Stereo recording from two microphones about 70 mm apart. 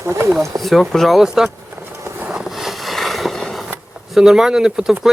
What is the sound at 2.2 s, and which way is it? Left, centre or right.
Vehicle, centre.